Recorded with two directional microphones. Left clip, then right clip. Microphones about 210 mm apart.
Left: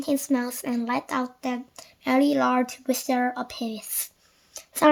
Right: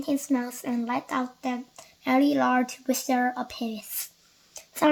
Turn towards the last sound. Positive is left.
turn(degrees=35)  # may be behind; listen again after turning